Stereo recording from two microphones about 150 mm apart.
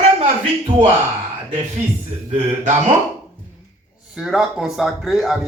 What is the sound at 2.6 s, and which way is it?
Speech, 55° right (ahead or behind).